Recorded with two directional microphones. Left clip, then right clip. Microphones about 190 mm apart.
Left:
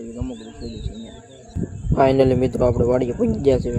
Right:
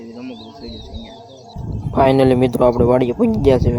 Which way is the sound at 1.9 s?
20° right (ahead or behind).